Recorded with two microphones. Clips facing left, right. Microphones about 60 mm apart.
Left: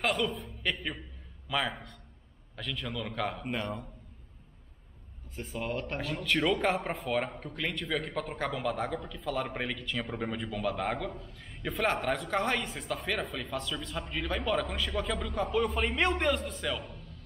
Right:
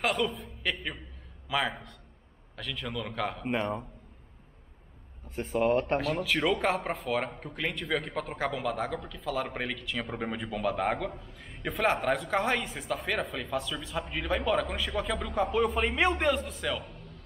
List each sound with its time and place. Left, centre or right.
0.0 s speech: centre
3.4 s a man's voice: right
5.3 s speech: right
5.9 s speech: centre